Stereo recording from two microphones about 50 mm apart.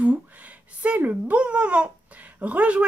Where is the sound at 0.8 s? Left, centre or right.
Right.